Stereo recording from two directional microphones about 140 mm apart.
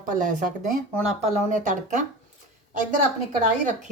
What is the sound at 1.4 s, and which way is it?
Speech, 60° right (ahead or behind).